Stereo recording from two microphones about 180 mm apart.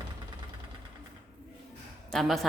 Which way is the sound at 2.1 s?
Centre (ahead or behind).